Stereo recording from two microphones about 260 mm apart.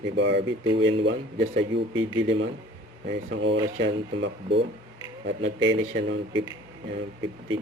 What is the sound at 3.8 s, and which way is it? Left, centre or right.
Speech, right.